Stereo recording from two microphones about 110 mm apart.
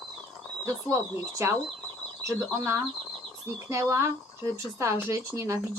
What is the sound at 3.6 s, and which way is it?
Speech, 25° right (ahead or behind).